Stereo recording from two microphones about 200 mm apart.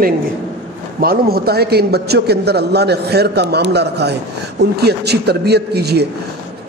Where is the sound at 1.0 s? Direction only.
50° right (ahead or behind).